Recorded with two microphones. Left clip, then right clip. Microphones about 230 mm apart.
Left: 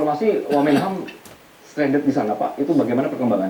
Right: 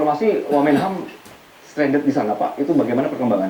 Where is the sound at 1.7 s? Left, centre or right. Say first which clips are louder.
Right 1 dB; centre.